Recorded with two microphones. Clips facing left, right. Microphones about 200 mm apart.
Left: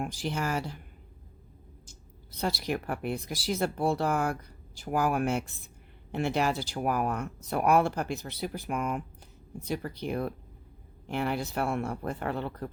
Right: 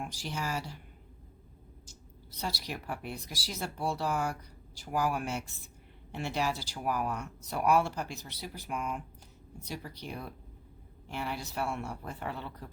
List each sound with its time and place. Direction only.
0.0 s speech: 55° left (ahead or behind)
1.9 s speech: 55° left (ahead or behind)